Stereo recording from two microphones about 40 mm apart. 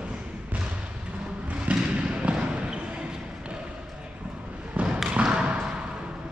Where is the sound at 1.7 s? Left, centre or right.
Right.